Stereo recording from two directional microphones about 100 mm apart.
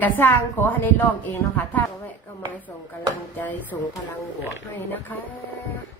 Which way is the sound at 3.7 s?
35° left (ahead or behind).